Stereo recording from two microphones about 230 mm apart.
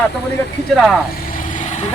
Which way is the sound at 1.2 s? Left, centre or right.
Left.